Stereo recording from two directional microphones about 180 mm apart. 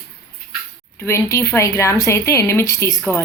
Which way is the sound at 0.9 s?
15° left (ahead or behind).